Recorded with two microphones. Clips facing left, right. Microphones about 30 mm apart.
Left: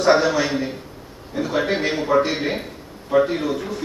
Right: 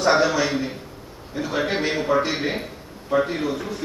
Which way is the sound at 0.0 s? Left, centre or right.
Centre.